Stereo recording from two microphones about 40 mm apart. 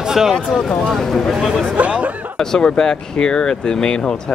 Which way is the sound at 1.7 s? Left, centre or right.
Right.